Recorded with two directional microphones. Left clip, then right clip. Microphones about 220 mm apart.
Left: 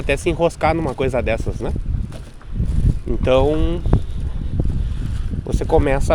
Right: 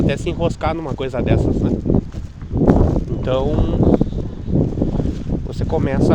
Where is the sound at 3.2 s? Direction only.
20° left (ahead or behind).